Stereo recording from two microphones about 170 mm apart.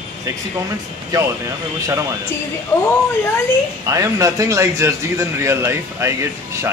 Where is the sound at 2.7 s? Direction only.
15° left (ahead or behind).